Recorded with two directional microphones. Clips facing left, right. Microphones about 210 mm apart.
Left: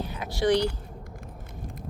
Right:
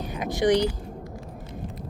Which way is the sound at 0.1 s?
15° right (ahead or behind).